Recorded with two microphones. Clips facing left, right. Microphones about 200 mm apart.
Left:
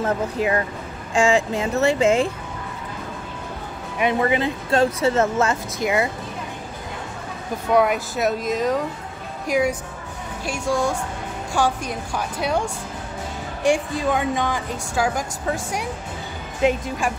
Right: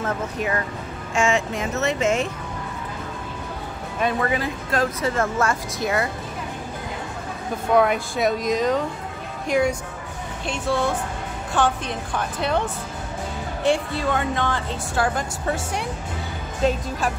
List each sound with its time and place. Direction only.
0.0 s speech: 25° left (ahead or behind)
4.0 s speech: 20° left (ahead or behind)
7.7 s a woman's voice: 5° left (ahead or behind)